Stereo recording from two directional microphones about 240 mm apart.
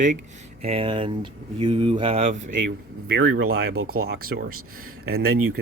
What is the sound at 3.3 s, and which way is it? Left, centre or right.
Speech, right.